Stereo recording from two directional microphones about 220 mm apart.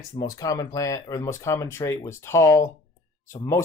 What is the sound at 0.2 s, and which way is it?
Speech, 15° left (ahead or behind).